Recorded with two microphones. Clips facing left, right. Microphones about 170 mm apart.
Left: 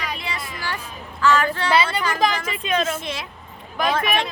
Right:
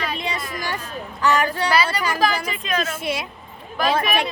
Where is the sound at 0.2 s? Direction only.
20° right (ahead or behind).